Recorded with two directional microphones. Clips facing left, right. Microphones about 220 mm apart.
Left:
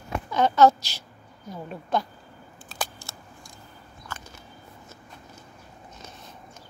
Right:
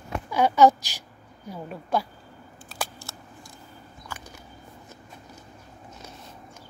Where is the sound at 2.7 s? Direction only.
10° right (ahead or behind).